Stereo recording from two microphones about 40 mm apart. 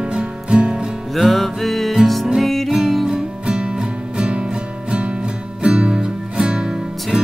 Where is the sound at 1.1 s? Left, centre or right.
Centre.